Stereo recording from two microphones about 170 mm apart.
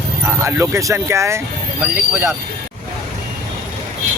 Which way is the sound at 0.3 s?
15° right (ahead or behind).